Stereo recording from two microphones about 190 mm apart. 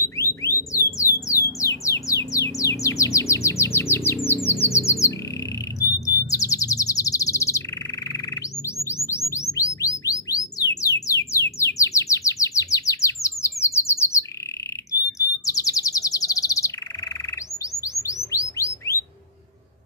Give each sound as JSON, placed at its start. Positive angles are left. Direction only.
{"t": 0.2, "sound": "alarm", "side_deg": 15}
{"t": 1.6, "sound": "music", "side_deg": 15}
{"t": 2.3, "sound": "bird", "side_deg": 15}
{"t": 5.8, "sound": "chirp", "side_deg": 15}
{"t": 8.1, "sound": "bird", "side_deg": 15}
{"t": 11.3, "sound": "chirp", "side_deg": 15}